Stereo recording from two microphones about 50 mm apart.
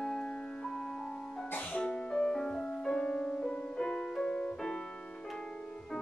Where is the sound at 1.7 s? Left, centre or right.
Centre.